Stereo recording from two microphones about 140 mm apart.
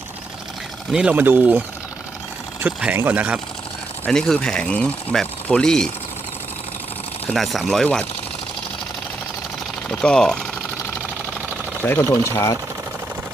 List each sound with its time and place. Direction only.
0.9 s speech: 10° right (ahead or behind)
4.0 s speech: 5° left (ahead or behind)
7.3 s speech: centre (ahead or behind)
9.9 s speech: 5° left (ahead or behind)
11.8 s speech: 15° left (ahead or behind)